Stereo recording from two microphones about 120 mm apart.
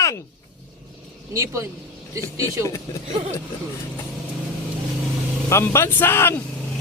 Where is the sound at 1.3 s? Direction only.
25° right (ahead or behind).